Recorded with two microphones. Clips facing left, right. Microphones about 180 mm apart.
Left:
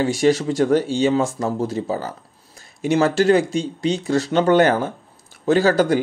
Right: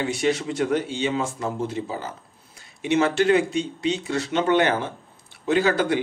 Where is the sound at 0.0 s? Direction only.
35° left (ahead or behind).